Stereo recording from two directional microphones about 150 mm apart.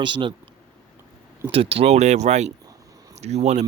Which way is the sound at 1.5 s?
40° right (ahead or behind).